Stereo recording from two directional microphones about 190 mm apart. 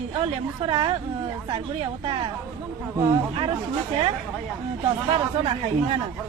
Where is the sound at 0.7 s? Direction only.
25° right (ahead or behind).